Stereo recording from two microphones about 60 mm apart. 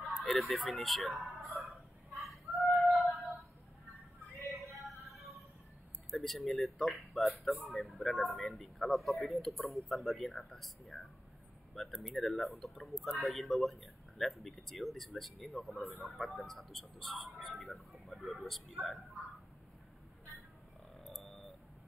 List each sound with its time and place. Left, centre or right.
0.0 s fowl: centre
4.8 s music: centre
6.0 s speech: centre
11.7 s speech: centre